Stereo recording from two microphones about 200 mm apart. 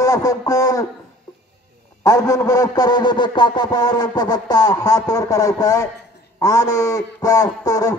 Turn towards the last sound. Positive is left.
turn(degrees=20)  # may be behind; listen again after turning